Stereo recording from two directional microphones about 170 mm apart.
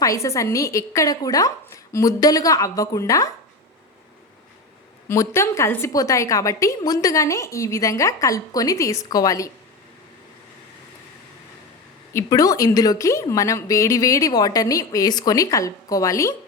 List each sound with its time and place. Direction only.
0.0 s a woman's voice: 20° left (ahead or behind)
5.0 s a woman's voice: 15° left (ahead or behind)
12.1 s a woman's voice: 20° left (ahead or behind)